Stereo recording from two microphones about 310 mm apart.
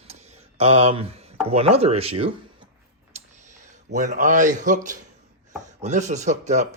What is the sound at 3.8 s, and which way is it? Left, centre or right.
Speech, right.